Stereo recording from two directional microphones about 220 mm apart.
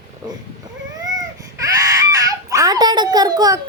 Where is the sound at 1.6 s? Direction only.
15° right (ahead or behind).